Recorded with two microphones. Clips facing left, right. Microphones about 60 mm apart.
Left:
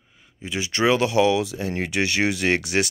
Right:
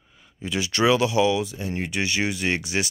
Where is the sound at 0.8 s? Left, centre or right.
Left.